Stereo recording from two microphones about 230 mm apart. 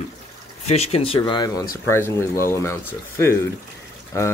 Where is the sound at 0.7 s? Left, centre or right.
Left.